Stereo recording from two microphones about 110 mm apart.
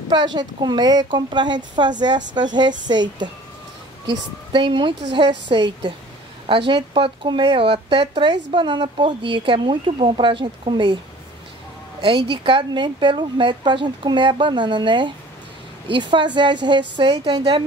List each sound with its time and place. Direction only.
0.1 s speech: 40° right (ahead or behind)
12.0 s speech: 50° right (ahead or behind)